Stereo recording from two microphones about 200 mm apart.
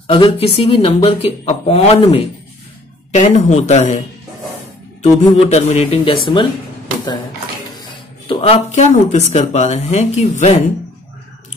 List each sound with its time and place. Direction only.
0.0 s speech: 30° left (ahead or behind)
5.0 s speech: 35° left (ahead or behind)
7.9 s speech: 25° left (ahead or behind)